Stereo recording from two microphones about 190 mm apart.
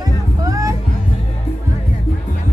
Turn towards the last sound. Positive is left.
turn(degrees=-15)  # may be behind; listen again after turning